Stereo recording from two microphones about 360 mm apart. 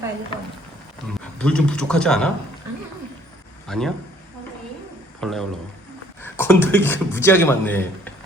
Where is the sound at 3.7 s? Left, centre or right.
Centre.